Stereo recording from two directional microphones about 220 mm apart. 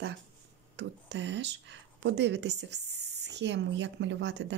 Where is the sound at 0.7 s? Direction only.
55° right (ahead or behind).